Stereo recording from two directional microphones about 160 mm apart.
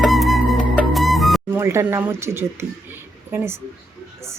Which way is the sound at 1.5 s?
15° right (ahead or behind).